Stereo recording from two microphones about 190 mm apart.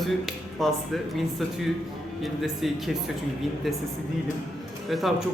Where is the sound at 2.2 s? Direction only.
Centre (ahead or behind).